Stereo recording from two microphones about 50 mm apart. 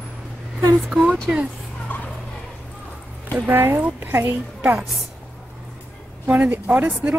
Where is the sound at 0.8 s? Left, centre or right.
Centre.